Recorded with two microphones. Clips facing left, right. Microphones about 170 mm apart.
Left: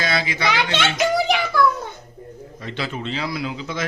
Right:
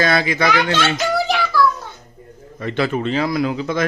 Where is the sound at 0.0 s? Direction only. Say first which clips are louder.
Right 6 dB; 50° right (ahead or behind).